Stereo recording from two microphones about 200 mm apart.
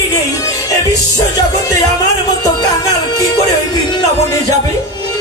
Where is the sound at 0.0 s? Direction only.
20° left (ahead or behind).